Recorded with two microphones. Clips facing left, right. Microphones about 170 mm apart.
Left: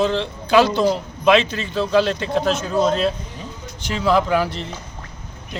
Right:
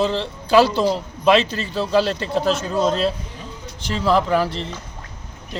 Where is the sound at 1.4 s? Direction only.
35° right (ahead or behind).